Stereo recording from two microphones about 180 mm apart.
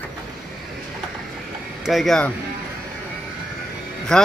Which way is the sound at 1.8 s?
Centre (ahead or behind).